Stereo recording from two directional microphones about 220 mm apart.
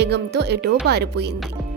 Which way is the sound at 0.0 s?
50° right (ahead or behind).